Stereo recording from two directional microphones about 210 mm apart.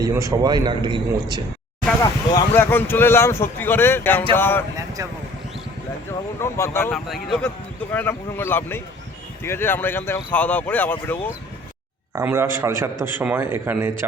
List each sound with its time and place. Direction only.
0.0 s a man's voice: 15° right (ahead or behind)
2.0 s speech: 10° left (ahead or behind)
6.4 s speech: 10° left (ahead or behind)
12.1 s a man's voice: 10° right (ahead or behind)